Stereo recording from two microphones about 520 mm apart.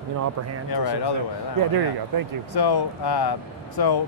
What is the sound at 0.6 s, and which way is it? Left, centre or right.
Speech, left.